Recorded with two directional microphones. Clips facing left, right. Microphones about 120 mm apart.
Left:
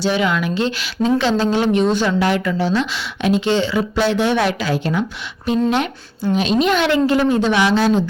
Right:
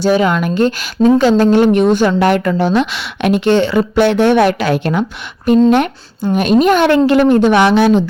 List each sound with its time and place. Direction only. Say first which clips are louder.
0.0 s a woman's voice: right 6 dB; 45° right (ahead or behind); by 5.0 s 60° right (ahead or behind)
6.3 s a woman's voice: right 6 dB; 50° right (ahead or behind)
7.1 s a woman's voice: right 6 dB; 65° right (ahead or behind)